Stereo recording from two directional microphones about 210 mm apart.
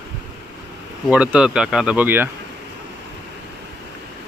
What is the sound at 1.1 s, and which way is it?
Speech, 5° right (ahead or behind).